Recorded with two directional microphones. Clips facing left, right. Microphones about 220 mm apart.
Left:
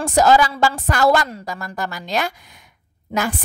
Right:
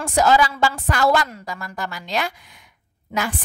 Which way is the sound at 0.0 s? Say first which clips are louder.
Left 3 dB; 40° left (ahead or behind).